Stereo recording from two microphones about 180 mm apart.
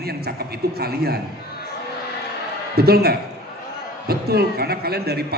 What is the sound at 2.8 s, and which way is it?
A man's voice, 60° right (ahead or behind).